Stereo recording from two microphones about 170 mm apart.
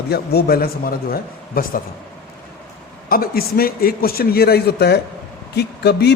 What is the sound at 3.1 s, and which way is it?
A man's voice, 60° left (ahead or behind).